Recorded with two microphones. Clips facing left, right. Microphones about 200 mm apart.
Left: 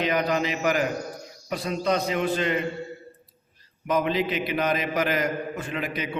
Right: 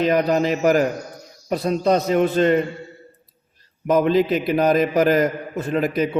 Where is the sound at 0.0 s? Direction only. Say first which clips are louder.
Right 6 dB; 40° right (ahead or behind).